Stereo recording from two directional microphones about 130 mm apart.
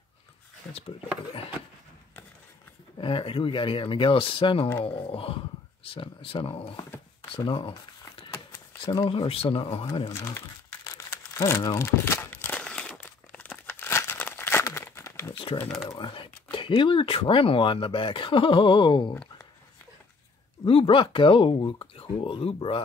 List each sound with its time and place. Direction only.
3.0 s speech: 40° left (ahead or behind)
7.3 s a sound: 40° left (ahead or behind)
8.3 s a sound: 25° left (ahead or behind)
8.8 s speech: 35° left (ahead or behind)
10.0 s speech: 20° left (ahead or behind)
11.3 s crumpling: 25° left (ahead or behind)
16.0 s speech: 40° left (ahead or behind)
20.6 s speech: 45° left (ahead or behind)